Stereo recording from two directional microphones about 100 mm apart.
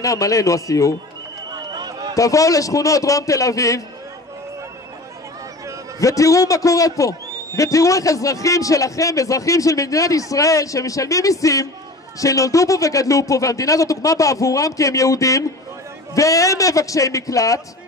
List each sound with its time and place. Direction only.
0.0 s a man's voice: 35° left (ahead or behind)
1.5 s a sound: 45° right (ahead or behind)
2.1 s a man's voice: 35° left (ahead or behind)
5.9 s a man's voice: 35° left (ahead or behind)